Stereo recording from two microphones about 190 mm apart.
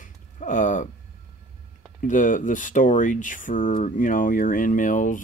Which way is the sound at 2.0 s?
40° left (ahead or behind).